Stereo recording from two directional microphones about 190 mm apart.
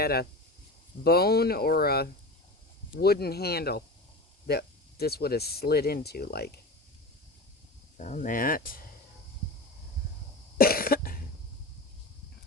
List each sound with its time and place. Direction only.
0.0 s speech: 55° left (ahead or behind)
7.9 s speech: 40° left (ahead or behind)
10.6 s cough: 50° left (ahead or behind)